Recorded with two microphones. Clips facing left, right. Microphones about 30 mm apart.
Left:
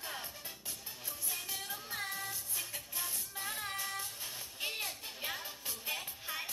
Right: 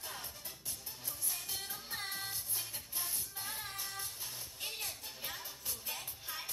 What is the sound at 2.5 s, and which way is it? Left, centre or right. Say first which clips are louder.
Music: left 2 dB; left.